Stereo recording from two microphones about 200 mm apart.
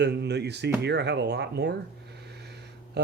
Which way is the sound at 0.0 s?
55° right (ahead or behind).